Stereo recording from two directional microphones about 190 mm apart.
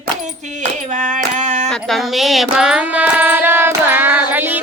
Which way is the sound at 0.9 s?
40° right (ahead or behind).